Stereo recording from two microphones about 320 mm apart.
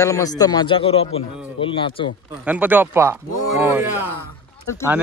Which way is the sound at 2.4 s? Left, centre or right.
Centre.